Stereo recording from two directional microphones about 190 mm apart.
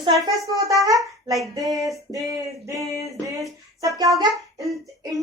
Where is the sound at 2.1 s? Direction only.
15° right (ahead or behind).